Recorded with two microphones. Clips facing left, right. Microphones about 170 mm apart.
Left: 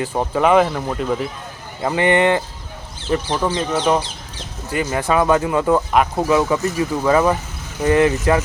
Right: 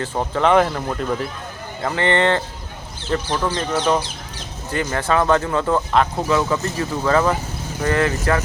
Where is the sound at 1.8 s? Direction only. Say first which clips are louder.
Left 3 dB; 15° left (ahead or behind).